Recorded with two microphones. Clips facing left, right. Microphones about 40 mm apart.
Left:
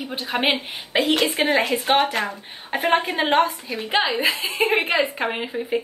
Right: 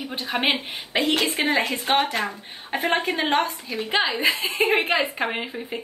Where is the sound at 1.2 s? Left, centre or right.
Centre.